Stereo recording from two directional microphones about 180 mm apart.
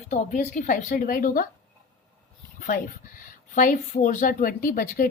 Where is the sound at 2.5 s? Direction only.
50° left (ahead or behind).